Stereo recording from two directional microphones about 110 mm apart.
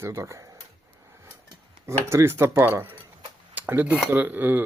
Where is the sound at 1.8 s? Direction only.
25° right (ahead or behind).